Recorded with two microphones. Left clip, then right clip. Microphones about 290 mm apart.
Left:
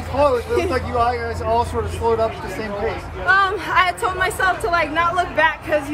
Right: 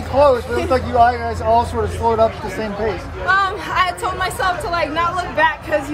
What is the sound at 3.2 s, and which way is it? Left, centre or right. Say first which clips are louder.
Speech: even; centre.